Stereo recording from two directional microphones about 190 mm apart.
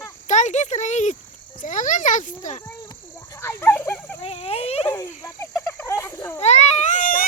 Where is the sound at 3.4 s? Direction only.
10° left (ahead or behind).